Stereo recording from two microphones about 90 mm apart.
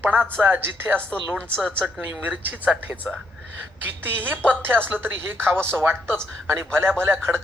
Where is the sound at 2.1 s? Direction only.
15° right (ahead or behind).